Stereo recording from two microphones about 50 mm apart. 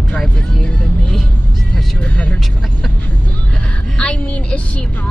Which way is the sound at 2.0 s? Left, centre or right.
Left.